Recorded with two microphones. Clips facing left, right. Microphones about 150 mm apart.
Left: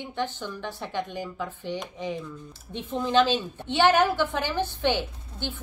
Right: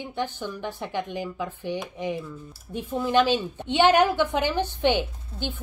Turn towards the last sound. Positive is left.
turn(degrees=-15)  # may be behind; listen again after turning